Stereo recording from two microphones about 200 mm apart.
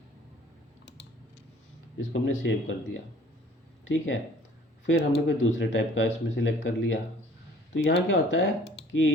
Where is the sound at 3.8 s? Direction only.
75° left (ahead or behind).